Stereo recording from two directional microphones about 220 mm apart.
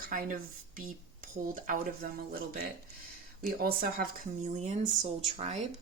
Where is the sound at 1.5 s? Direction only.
40° right (ahead or behind).